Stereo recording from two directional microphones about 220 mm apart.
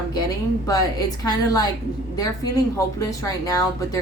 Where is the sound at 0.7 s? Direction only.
15° left (ahead or behind).